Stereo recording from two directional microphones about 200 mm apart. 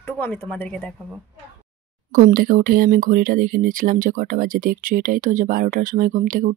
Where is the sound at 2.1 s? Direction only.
45° right (ahead or behind).